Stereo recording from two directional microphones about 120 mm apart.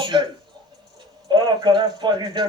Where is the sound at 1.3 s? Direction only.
40° right (ahead or behind).